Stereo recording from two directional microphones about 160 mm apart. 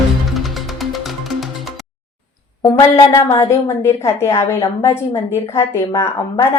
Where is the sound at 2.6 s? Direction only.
20° left (ahead or behind).